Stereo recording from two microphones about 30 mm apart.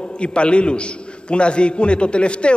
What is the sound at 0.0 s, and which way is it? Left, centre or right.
A man's voice, left.